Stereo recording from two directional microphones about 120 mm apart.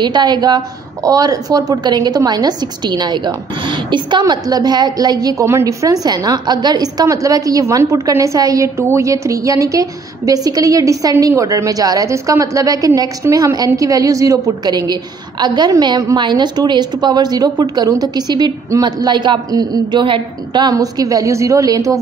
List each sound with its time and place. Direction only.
0.0 s a woman's voice: 40° right (ahead or behind)